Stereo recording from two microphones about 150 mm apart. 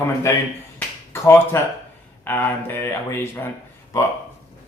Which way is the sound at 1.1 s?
15° left (ahead or behind).